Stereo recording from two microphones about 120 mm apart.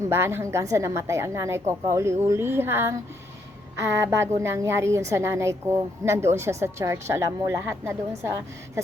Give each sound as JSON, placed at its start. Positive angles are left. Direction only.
{"t": 0.0, "sound": "a woman's voice", "side_deg": -20}